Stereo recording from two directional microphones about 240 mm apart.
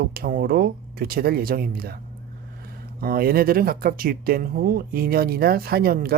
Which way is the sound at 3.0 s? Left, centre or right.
Right.